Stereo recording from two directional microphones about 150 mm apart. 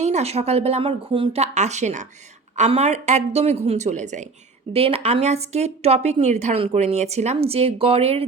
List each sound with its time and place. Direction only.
0.0 s a woman's voice: 45° right (ahead or behind)
4.7 s a woman's voice: 40° right (ahead or behind)